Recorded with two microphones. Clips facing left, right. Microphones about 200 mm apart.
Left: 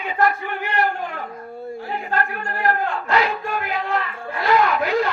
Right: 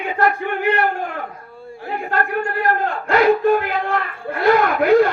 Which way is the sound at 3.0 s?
50° right (ahead or behind).